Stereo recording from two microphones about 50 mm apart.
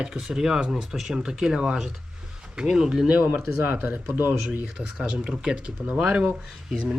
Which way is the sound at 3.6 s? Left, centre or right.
Right.